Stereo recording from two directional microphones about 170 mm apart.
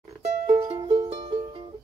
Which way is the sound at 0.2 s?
40° right (ahead or behind).